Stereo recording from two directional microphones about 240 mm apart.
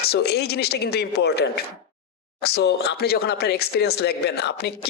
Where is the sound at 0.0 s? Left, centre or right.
Left.